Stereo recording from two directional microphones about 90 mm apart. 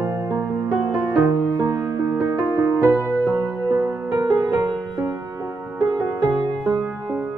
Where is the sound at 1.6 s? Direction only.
35° right (ahead or behind).